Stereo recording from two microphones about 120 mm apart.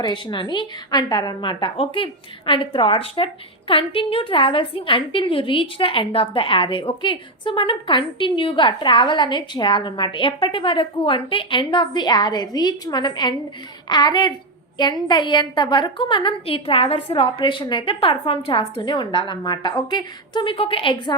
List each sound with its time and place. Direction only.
0.0 s a woman's voice: 40° left (ahead or behind)
18.8 s a woman's voice: 40° left (ahead or behind)